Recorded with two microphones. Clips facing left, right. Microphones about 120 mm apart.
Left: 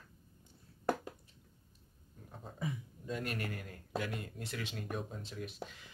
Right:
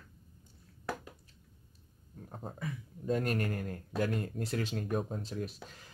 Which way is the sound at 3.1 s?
45° right (ahead or behind).